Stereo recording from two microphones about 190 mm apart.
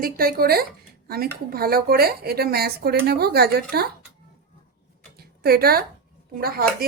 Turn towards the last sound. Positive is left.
turn(degrees=-50)  # may be behind; listen again after turning